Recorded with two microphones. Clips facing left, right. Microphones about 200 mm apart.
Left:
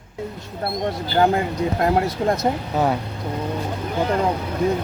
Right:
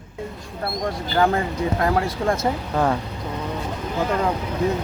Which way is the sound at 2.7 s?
10° left (ahead or behind).